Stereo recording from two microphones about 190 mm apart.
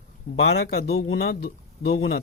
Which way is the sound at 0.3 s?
75° left (ahead or behind).